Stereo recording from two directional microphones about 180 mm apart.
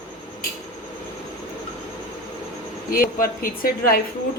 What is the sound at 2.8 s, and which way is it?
Speech, 55° left (ahead or behind).